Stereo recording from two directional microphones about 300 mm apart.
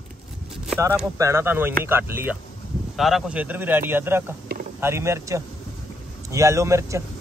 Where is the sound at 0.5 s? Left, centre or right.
Centre.